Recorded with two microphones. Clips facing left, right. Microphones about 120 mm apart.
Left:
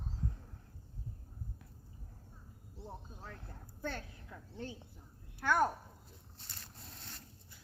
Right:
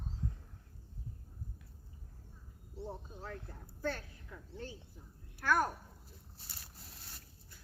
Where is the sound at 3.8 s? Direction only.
20° left (ahead or behind).